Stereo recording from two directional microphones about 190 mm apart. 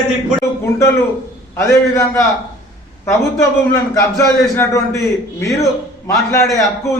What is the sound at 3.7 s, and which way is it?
A man's voice, 15° left (ahead or behind).